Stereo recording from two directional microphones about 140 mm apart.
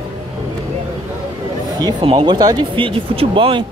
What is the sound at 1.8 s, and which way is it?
Speech, 40° right (ahead or behind).